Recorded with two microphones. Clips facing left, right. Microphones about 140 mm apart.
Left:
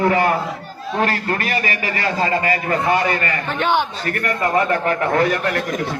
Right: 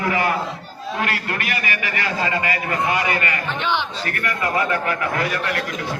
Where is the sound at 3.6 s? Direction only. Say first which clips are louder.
Left 7 dB; 45° left (ahead or behind).